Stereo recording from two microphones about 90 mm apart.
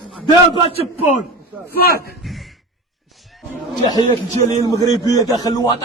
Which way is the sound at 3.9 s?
55° left (ahead or behind).